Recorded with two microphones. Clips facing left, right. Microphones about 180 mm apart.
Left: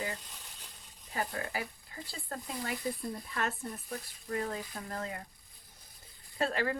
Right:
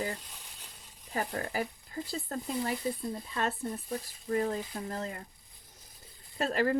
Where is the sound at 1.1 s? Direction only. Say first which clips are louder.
Right 3 dB; 40° right (ahead or behind).